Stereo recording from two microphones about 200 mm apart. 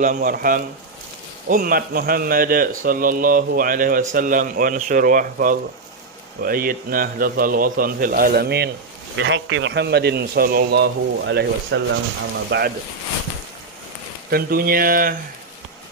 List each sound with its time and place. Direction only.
0.0 s a man's voice: 40° right (ahead or behind)
9.1 s a man's voice: 65° right (ahead or behind)
14.3 s a man's voice: 45° right (ahead or behind)